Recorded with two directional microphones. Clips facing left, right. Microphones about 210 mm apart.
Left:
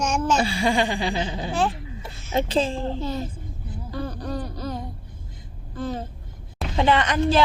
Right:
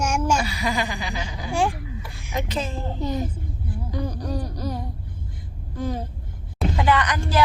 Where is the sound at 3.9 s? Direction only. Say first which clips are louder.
Right 1 dB; 15° right (ahead or behind).